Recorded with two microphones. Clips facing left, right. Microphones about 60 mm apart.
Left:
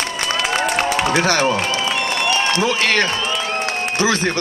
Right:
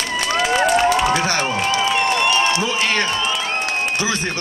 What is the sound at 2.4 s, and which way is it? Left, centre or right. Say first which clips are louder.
A man's voice: left 1 dB; left.